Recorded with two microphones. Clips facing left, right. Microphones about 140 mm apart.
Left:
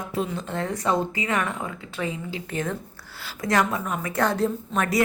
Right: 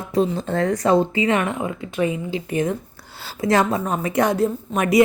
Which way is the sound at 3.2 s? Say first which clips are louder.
Right 5 dB; 30° right (ahead or behind).